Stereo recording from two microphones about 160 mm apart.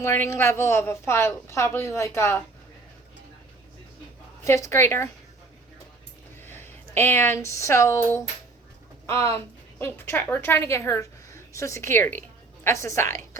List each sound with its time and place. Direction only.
0.0 s a woman's voice: 15° left (ahead or behind)
4.4 s a woman's voice: 20° left (ahead or behind)
6.4 s speech: 15° left (ahead or behind)
9.2 s a woman's voice: 15° left (ahead or behind)